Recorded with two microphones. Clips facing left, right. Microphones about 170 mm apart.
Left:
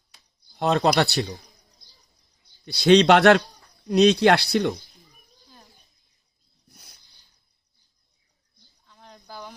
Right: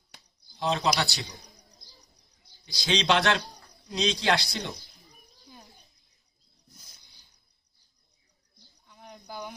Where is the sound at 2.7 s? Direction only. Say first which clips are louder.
Left 11 dB; 60° left (ahead or behind).